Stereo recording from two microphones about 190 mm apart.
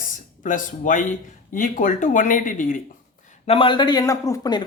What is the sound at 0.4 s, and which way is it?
Speech, 45° left (ahead or behind).